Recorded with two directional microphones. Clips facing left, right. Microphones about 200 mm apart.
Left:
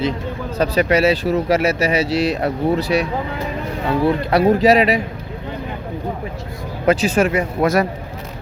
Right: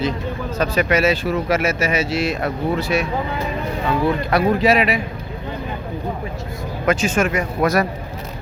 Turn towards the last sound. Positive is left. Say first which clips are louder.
# left 1 dB
turn(degrees=25)  # may be behind; listen again after turning